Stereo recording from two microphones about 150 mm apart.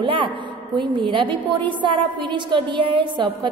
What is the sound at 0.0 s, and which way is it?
A woman's voice, 35° right (ahead or behind).